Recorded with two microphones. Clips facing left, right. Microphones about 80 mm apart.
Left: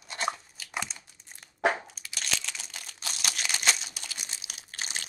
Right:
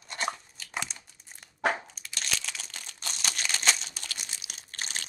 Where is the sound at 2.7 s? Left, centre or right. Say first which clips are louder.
Even; centre.